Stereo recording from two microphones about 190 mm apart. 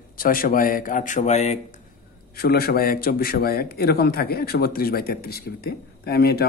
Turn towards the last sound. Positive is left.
turn(degrees=55)  # may be behind; listen again after turning